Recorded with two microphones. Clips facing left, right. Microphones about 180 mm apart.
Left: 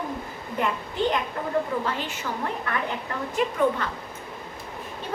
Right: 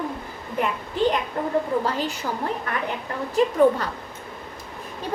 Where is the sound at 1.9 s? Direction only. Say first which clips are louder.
Right 4 dB; 40° right (ahead or behind).